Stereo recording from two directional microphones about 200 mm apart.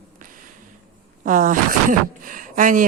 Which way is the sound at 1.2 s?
40° right (ahead or behind).